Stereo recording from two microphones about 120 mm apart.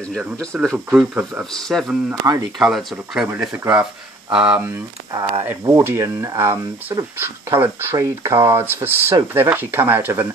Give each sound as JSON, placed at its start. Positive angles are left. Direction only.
{"t": 0.5, "sound": "speech", "side_deg": -10}
{"t": 1.5, "sound": "speech", "side_deg": 0}
{"t": 2.3, "sound": "speech", "side_deg": -25}
{"t": 2.6, "sound": "speech", "side_deg": 0}
{"t": 4.3, "sound": "speech", "side_deg": -10}
{"t": 5.5, "sound": "speech", "side_deg": -20}